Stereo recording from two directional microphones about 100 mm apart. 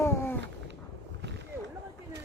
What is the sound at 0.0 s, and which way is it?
Cat, 25° left (ahead or behind).